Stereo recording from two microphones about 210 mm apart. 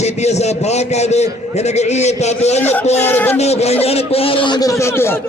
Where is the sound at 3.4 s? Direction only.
30° left (ahead or behind); by 5.2 s 10° left (ahead or behind).